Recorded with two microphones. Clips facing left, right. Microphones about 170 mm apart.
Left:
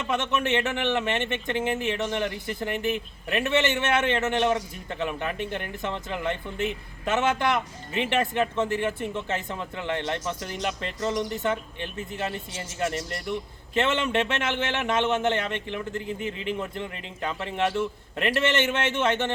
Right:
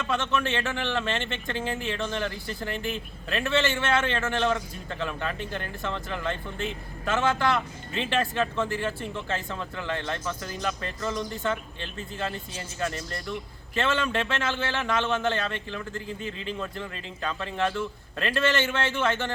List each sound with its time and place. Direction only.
0.0 s speech: 20° left (ahead or behind)